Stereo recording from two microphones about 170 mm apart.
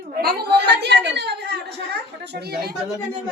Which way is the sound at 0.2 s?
65° right (ahead or behind).